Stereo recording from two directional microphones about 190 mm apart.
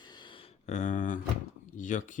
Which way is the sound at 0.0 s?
25° left (ahead or behind).